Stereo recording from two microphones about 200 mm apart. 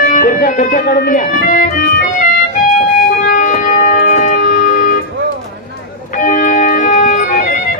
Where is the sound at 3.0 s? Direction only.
45° left (ahead or behind).